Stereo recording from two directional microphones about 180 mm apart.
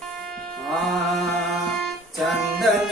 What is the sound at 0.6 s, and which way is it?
Music, centre (ahead or behind).